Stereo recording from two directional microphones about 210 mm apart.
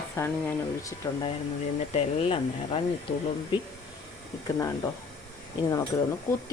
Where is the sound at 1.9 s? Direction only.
30° left (ahead or behind).